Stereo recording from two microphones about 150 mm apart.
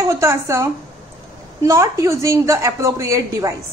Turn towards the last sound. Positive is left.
turn(degrees=-20)  # may be behind; listen again after turning